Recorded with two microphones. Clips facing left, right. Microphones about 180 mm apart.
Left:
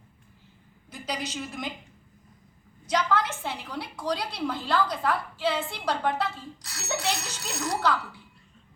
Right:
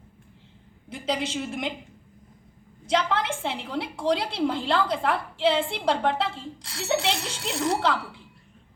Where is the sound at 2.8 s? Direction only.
25° right (ahead or behind).